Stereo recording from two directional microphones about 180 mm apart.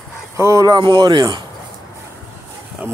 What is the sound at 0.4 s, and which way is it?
Speech, 15° right (ahead or behind).